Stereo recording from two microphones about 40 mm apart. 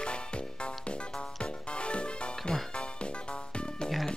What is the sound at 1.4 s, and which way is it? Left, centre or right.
Music, left.